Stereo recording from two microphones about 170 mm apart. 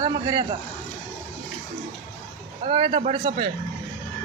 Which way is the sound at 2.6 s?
30° right (ahead or behind).